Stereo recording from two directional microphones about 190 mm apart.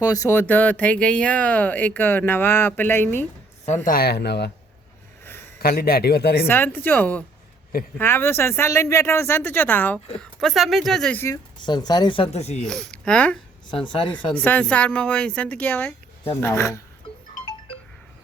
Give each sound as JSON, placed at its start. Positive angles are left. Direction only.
{"t": 0.0, "sound": "speech", "side_deg": 15}
{"t": 3.8, "sound": "speech", "side_deg": 55}
{"t": 5.5, "sound": "speech", "side_deg": 55}
{"t": 6.5, "sound": "speech", "side_deg": 10}
{"t": 11.6, "sound": "speech", "side_deg": 20}
{"t": 12.6, "sound": "speech", "side_deg": 5}
{"t": 13.7, "sound": "speech", "side_deg": 25}
{"t": 14.3, "sound": "speech", "side_deg": 10}